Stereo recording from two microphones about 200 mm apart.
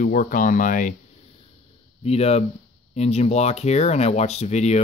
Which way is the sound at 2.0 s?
30° left (ahead or behind).